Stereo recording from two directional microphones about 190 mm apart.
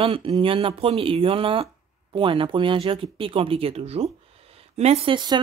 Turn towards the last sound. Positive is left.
turn(degrees=-25)  # may be behind; listen again after turning